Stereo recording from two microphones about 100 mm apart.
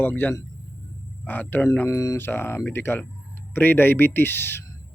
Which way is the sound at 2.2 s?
20° left (ahead or behind).